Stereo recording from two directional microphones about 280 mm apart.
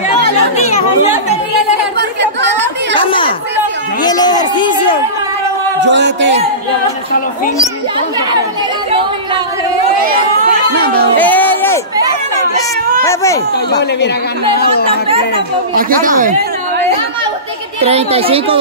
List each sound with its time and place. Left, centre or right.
2.9 s a sound: centre
5.8 s a man's voice: right
10.8 s speech: right
11.1 s a sound: centre
13.0 s speech: centre
15.7 s speech: right
17.8 s speech: right